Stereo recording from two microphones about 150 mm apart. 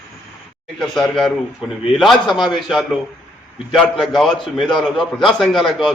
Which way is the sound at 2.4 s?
30° left (ahead or behind).